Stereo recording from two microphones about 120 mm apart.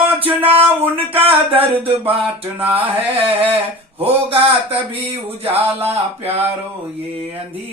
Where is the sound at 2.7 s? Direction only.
50° right (ahead or behind).